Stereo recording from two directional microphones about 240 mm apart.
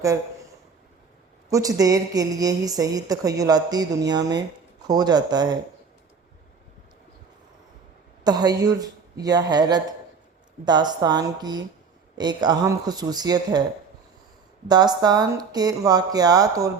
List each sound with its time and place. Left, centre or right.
1.5 s a woman's voice: centre
8.2 s a woman's voice: centre
14.7 s a woman's voice: centre